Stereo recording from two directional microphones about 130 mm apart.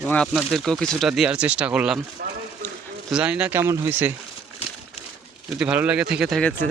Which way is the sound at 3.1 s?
10° right (ahead or behind).